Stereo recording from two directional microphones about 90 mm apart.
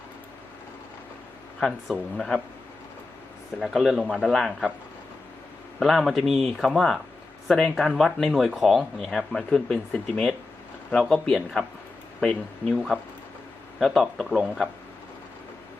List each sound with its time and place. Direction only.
2.1 s speech: 5° left (ahead or behind)
3.6 s speech: centre (ahead or behind)
5.8 s speech: centre (ahead or behind)